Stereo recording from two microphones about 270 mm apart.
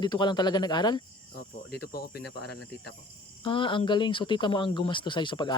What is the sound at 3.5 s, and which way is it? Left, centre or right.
Speech, centre.